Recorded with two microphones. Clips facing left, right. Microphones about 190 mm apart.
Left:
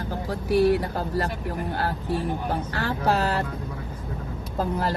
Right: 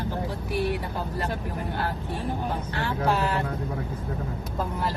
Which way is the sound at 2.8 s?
35° left (ahead or behind).